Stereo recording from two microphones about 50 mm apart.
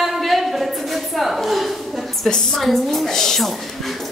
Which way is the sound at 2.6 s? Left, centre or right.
Centre.